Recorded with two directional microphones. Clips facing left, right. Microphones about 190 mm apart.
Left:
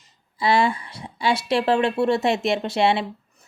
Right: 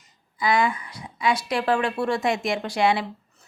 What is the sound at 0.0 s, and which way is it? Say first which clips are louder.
A woman's voice: left 2 dB; 30° left (ahead or behind).